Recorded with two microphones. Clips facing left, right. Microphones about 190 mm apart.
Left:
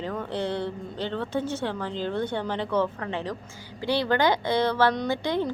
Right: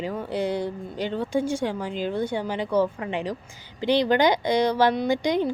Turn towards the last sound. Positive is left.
turn(degrees=-15)  # may be behind; listen again after turning